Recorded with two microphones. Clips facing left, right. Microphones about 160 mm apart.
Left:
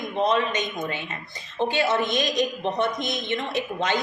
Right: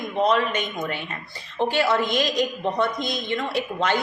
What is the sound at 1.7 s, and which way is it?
A woman's voice, 20° left (ahead or behind).